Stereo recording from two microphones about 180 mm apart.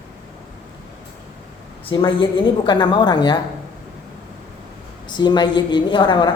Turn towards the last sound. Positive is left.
turn(degrees=25)  # may be behind; listen again after turning